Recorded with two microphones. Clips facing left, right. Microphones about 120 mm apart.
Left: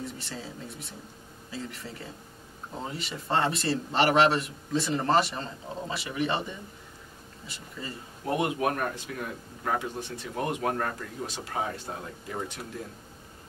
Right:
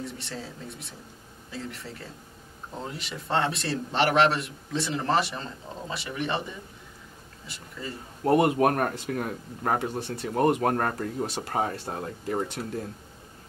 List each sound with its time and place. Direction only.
0.0 s a man's voice: centre (ahead or behind)
8.3 s speech: 50° right (ahead or behind)